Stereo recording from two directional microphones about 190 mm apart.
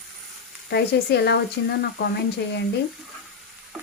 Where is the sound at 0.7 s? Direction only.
60° left (ahead or behind).